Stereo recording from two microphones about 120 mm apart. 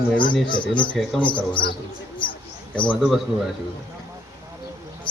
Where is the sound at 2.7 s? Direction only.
10° left (ahead or behind).